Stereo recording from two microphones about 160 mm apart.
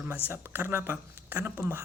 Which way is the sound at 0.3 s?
15° right (ahead or behind).